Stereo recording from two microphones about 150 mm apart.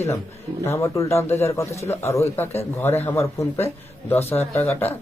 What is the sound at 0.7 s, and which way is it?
Speech, 20° left (ahead or behind).